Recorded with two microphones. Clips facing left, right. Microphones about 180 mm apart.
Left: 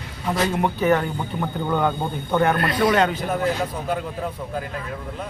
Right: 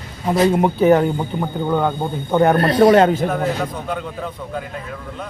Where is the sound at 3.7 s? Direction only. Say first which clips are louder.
Even; 5° left (ahead or behind).